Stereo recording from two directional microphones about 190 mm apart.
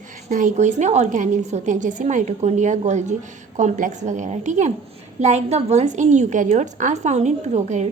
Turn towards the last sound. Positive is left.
turn(degrees=-35)  # may be behind; listen again after turning